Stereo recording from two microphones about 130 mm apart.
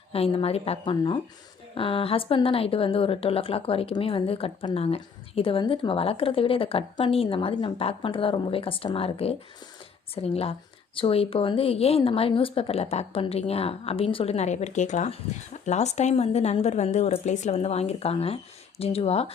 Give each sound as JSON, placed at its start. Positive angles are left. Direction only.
{"t": 0.1, "sound": "a woman's voice", "side_deg": 50}